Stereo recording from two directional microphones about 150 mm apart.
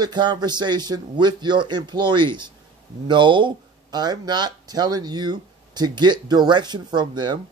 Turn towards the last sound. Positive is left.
turn(degrees=-30)  # may be behind; listen again after turning